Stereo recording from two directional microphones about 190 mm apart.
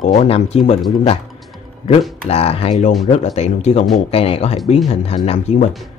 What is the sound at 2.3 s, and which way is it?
Speech, 30° left (ahead or behind).